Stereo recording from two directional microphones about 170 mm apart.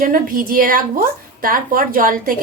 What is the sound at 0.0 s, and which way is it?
A woman's voice, 55° right (ahead or behind).